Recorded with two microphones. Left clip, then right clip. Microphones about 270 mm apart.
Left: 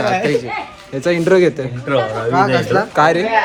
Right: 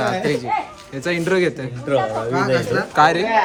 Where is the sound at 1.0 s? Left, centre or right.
Centre.